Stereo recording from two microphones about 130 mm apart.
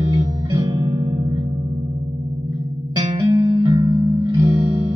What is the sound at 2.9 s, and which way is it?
Music, 35° right (ahead or behind).